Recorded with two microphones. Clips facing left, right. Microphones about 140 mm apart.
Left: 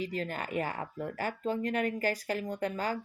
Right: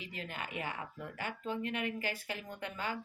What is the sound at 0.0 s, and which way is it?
Speech, 40° left (ahead or behind).